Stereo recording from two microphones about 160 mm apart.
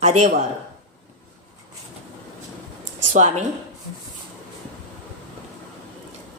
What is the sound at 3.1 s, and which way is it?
Speech, 50° right (ahead or behind).